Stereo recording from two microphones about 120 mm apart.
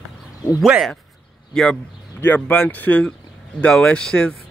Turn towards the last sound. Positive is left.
turn(degrees=5)  # may be behind; listen again after turning